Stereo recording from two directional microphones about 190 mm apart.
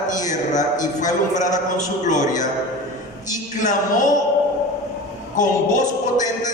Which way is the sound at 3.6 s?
40° left (ahead or behind).